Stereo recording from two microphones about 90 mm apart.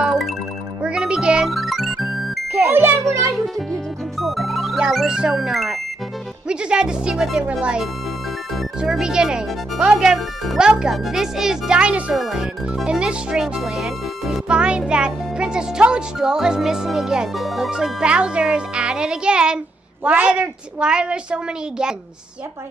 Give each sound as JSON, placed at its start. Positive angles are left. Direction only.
{"t": 0.0, "sound": "music", "side_deg": -5}
{"t": 2.5, "sound": "smoke detector", "side_deg": -25}
{"t": 3.3, "sound": "music", "side_deg": 0}
{"t": 4.7, "sound": "speech", "side_deg": -5}